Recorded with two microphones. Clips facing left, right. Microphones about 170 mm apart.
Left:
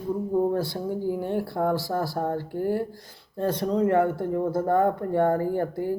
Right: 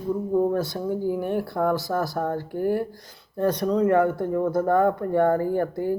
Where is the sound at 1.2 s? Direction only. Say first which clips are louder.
Right 2 dB; 25° left (ahead or behind).